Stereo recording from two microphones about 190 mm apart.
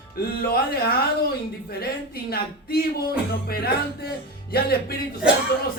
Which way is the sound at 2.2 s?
55° left (ahead or behind).